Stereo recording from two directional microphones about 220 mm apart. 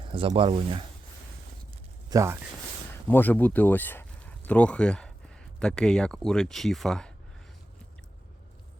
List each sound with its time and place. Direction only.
0.0 s speech: 25° right (ahead or behind)
2.0 s speech: 15° right (ahead or behind)
3.1 s speech: 10° left (ahead or behind)